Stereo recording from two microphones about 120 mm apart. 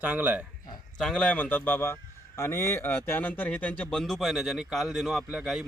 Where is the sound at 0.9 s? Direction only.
5° left (ahead or behind).